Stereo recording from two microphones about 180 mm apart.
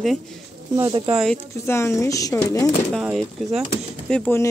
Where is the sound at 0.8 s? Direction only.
20° right (ahead or behind).